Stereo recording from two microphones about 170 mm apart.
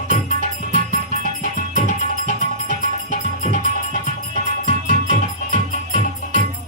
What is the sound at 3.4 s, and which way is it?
Music, 45° left (ahead or behind).